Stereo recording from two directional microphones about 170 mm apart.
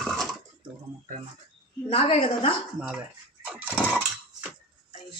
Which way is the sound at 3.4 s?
10° right (ahead or behind).